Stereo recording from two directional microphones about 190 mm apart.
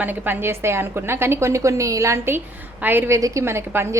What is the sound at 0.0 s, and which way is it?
A woman's voice, 10° right (ahead or behind).